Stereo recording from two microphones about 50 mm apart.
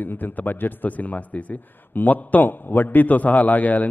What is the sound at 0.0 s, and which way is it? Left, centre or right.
A man's voice, left.